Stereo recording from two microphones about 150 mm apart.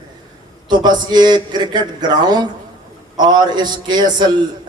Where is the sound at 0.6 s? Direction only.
30° right (ahead or behind).